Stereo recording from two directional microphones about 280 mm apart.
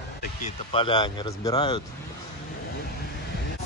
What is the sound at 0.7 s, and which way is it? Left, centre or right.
Speech, centre.